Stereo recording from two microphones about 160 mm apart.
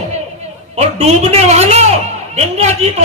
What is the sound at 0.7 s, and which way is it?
A man's voice, 40° right (ahead or behind).